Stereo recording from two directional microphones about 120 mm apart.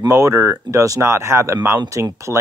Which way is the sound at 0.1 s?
25° right (ahead or behind).